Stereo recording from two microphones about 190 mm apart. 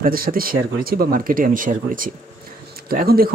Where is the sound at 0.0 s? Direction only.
50° right (ahead or behind).